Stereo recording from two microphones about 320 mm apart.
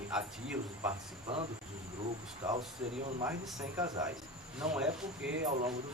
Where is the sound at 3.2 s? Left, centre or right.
Centre.